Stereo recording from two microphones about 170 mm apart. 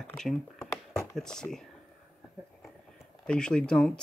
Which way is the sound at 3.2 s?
5° left (ahead or behind).